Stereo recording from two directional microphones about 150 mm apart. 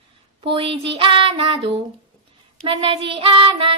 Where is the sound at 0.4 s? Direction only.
35° right (ahead or behind).